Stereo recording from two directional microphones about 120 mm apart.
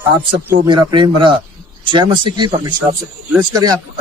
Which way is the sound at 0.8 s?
40° right (ahead or behind).